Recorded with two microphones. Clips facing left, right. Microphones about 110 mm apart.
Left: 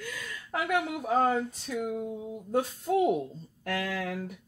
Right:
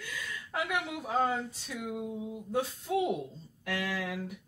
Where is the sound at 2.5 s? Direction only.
45° left (ahead or behind).